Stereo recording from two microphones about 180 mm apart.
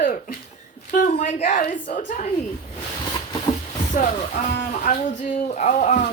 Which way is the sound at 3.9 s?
45° left (ahead or behind).